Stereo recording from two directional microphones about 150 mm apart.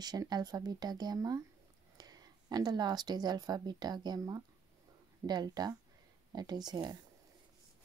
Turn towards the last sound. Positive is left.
turn(degrees=-25)  # may be behind; listen again after turning